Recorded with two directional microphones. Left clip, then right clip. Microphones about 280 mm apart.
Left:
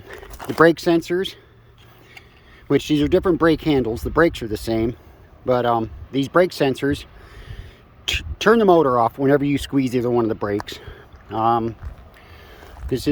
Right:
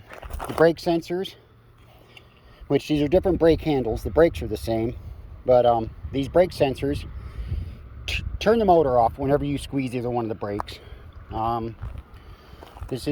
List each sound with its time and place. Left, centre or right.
0.3 s a sound: right
0.6 s speech: centre
2.6 s speech: centre
12.9 s speech: centre